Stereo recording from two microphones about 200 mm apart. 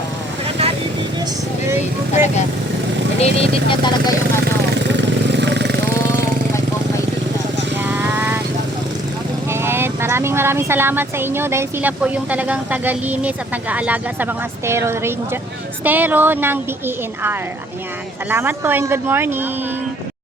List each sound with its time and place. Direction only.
1.7 s a woman's voice: 10° right (ahead or behind)
3.2 s speech: 30° left (ahead or behind)
4.7 s vehicle: 60° right (ahead or behind)
7.9 s vehicle: 10° right (ahead or behind)
9.5 s a woman's voice: 10° right (ahead or behind)